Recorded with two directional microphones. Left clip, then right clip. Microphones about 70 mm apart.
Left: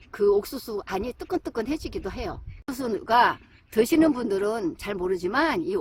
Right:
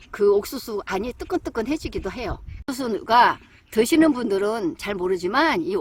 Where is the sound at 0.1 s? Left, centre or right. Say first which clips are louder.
Right 3 dB; right.